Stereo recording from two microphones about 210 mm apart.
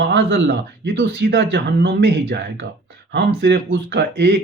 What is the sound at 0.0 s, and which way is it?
Speech, 55° right (ahead or behind).